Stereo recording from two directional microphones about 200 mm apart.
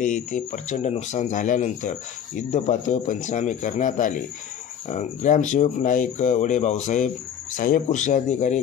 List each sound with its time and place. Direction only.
0.0 s speech: 40° left (ahead or behind)